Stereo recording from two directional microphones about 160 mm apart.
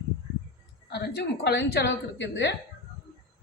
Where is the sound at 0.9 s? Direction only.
90° left.